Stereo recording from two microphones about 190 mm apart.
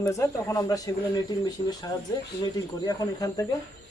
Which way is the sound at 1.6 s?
45° left (ahead or behind).